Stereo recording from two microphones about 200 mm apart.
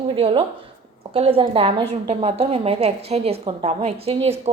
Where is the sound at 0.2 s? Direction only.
25° right (ahead or behind).